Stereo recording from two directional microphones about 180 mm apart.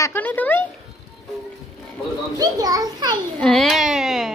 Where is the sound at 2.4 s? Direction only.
20° right (ahead or behind).